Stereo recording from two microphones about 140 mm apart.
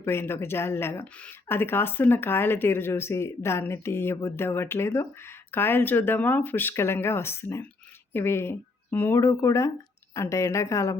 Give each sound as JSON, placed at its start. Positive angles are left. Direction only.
{"t": 0.0, "sound": "a woman's voice", "side_deg": 15}